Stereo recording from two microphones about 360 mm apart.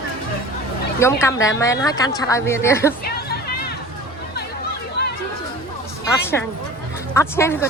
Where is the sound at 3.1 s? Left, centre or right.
Left.